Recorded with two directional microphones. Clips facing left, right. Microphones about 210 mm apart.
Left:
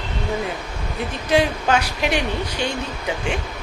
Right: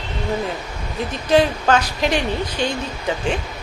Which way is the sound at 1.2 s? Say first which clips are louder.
Right 3 dB; 10° left (ahead or behind).